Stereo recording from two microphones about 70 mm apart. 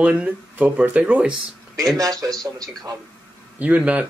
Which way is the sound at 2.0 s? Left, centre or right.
Right.